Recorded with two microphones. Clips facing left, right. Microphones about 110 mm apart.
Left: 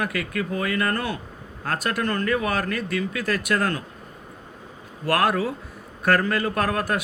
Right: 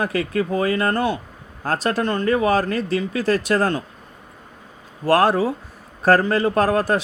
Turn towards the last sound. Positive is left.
turn(degrees=-30)  # may be behind; listen again after turning